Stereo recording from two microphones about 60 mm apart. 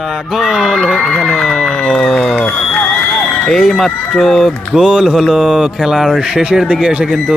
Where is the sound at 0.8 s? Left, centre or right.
Centre.